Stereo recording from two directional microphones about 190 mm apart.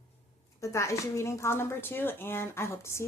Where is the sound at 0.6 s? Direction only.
15° left (ahead or behind).